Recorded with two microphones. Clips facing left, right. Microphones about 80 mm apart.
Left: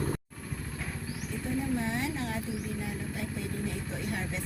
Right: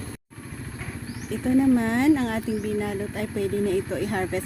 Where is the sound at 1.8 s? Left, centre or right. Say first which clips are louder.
Right 12 dB; right.